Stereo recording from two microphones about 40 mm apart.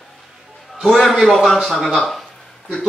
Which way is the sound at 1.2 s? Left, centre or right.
Centre.